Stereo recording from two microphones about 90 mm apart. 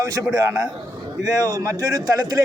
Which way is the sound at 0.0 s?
40° right (ahead or behind).